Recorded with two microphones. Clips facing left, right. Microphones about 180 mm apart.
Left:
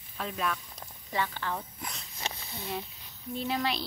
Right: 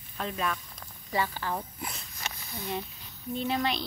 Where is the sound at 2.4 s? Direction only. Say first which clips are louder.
Right 2 dB; 15° left (ahead or behind).